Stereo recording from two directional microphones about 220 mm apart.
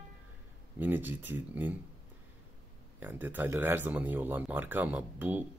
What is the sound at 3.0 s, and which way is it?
Speech, 10° right (ahead or behind).